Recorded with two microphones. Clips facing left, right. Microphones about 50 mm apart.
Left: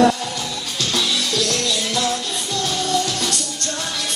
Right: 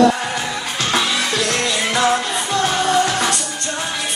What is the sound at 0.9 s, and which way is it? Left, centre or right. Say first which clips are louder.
Music: right 3 dB; right.